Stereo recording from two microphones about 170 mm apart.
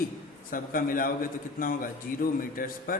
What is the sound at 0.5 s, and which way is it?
A man's voice, 55° left (ahead or behind).